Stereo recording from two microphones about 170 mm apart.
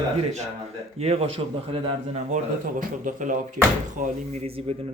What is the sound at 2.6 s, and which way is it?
Speech, 55° right (ahead or behind).